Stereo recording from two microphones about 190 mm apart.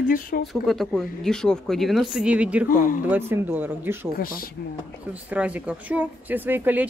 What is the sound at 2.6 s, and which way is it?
Speech, 45° left (ahead or behind).